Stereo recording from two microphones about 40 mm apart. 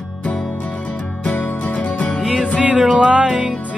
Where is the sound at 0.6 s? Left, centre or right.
Left.